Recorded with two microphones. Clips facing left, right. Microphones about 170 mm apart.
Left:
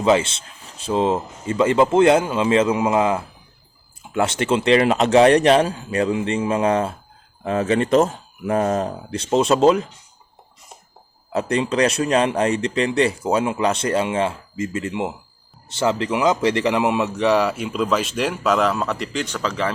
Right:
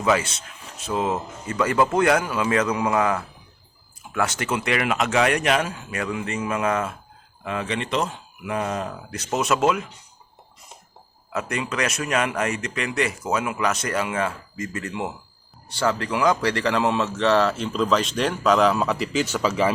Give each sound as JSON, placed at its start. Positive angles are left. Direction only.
{"t": 0.0, "sound": "a man's voice", "side_deg": 25}
{"t": 11.3, "sound": "a man's voice", "side_deg": 30}